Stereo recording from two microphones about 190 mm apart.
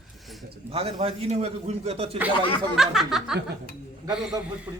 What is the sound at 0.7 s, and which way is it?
A man's voice, 30° right (ahead or behind).